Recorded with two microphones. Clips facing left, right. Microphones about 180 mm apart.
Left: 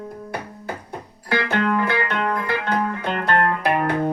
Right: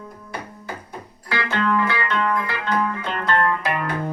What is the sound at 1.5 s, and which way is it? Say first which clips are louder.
Music: even; 55° left (ahead or behind).